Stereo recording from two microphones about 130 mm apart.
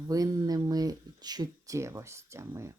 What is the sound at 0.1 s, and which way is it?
Speech, 25° right (ahead or behind).